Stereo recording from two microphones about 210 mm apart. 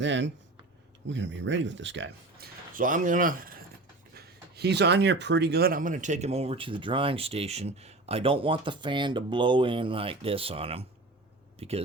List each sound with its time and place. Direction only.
0.0 s speech: 60° right (ahead or behind); by 11.7 s 30° right (ahead or behind)